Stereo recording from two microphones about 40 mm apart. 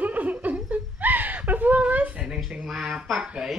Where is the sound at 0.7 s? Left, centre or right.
Right.